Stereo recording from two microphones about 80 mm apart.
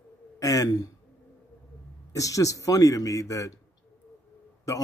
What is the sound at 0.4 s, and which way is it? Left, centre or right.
Speech, left.